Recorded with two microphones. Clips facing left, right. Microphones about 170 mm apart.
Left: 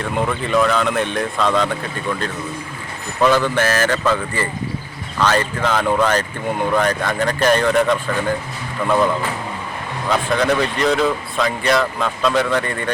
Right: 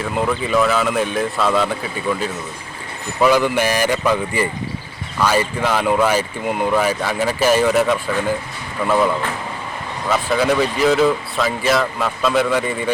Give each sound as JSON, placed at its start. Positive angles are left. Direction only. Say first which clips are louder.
{"t": 0.0, "sound": "speech", "louder": "right 1 dB", "side_deg": -5}
{"t": 10.1, "sound": "speech", "louder": "even", "side_deg": -5}